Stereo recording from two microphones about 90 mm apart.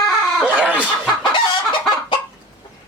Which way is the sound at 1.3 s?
60° left (ahead or behind).